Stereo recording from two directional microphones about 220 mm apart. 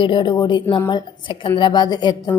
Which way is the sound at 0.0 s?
20° left (ahead or behind).